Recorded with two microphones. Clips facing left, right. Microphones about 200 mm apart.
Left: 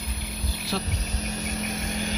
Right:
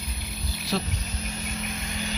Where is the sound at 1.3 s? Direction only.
40° left (ahead or behind).